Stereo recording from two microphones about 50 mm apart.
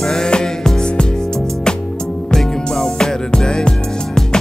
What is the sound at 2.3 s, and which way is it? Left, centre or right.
Music, centre.